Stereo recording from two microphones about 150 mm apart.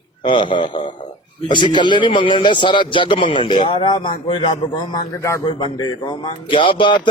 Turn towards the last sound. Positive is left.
turn(degrees=35)  # may be behind; listen again after turning